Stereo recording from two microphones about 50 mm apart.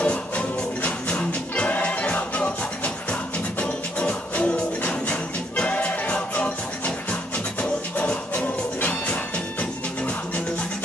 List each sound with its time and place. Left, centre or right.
0.0 s music: left
7.6 s music: left